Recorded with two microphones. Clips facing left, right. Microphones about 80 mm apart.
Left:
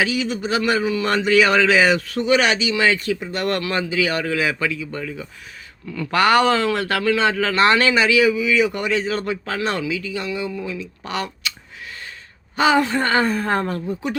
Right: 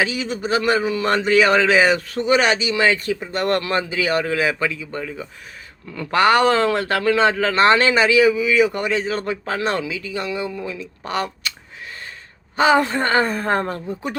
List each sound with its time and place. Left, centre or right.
0.0 s speech: right
12.5 s speech: right